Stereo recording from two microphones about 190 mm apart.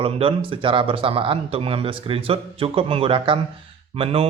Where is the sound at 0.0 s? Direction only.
30° right (ahead or behind).